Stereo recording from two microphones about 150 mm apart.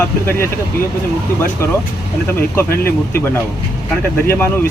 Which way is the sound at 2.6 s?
90° left.